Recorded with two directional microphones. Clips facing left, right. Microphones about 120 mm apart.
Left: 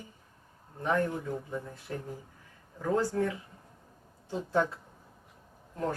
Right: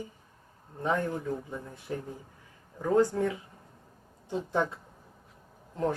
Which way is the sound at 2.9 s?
20° right (ahead or behind).